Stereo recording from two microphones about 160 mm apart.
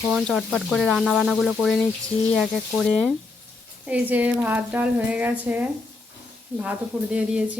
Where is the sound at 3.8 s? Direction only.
10° right (ahead or behind).